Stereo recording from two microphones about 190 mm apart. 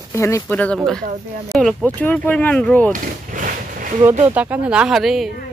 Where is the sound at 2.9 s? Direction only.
45° right (ahead or behind).